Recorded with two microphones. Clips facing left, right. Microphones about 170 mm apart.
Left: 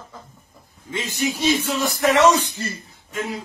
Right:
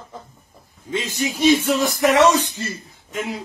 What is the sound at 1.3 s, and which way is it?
Speech, 20° right (ahead or behind).